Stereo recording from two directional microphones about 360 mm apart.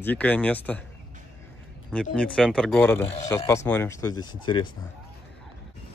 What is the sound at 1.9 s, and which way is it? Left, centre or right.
Speech, centre.